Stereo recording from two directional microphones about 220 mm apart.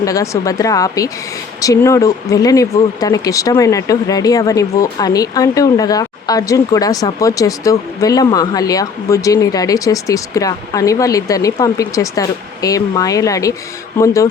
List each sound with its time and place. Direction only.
0.0 s speech: 15° left (ahead or behind)